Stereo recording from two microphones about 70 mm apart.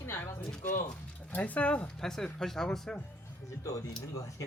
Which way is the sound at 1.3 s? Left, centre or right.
Left.